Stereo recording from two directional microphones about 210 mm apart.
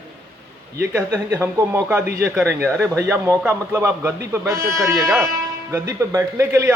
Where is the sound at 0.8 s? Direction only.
15° right (ahead or behind).